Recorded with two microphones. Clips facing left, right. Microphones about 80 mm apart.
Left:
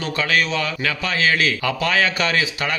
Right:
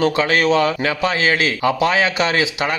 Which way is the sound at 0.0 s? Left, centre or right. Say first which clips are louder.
Right 5 dB; right.